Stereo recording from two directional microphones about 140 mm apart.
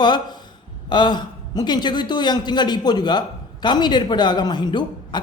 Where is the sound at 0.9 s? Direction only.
30° left (ahead or behind).